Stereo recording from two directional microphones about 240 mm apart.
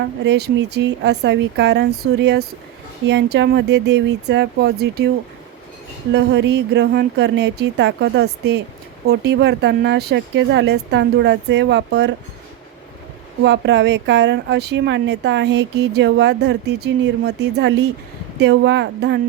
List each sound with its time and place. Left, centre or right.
0.3 s speech: right
6.1 s speech: right
13.4 s speech: right